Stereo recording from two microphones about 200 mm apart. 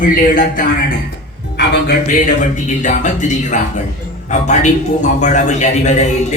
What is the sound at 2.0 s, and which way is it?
A woman's voice, 40° left (ahead or behind).